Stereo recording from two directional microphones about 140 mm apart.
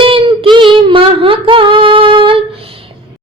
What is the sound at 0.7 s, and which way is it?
Humming, 40° right (ahead or behind).